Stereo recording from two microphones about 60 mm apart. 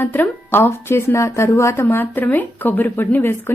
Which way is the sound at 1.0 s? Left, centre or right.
Left.